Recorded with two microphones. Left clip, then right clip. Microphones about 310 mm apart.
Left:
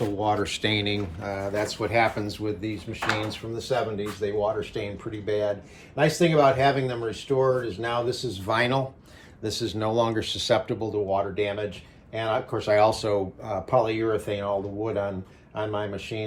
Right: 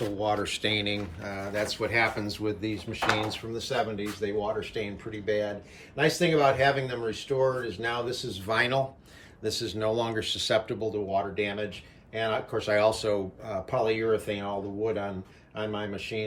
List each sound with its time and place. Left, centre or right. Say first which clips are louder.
0.2 s speech: left 2 dB; centre
6.0 s speech: left 3 dB; centre